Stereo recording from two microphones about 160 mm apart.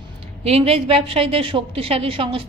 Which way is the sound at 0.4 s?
40° right (ahead or behind).